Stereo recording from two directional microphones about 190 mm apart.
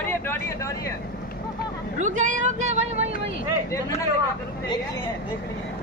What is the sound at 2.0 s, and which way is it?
Speech, 40° right (ahead or behind).